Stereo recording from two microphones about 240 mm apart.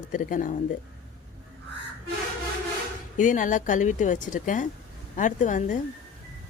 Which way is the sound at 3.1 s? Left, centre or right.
Left.